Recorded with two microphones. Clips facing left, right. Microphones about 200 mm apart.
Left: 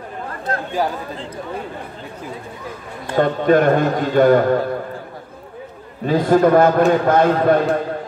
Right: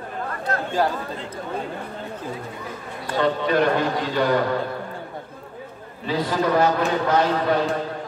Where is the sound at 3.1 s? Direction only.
50° left (ahead or behind).